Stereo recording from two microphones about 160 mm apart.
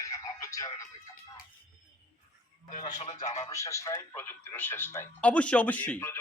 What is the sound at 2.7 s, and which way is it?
Speech, 50° left (ahead or behind).